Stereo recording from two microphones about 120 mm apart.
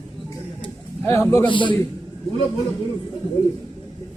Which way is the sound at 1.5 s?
45° left (ahead or behind).